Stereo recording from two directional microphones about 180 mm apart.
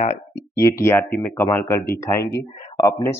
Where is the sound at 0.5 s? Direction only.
15° left (ahead or behind).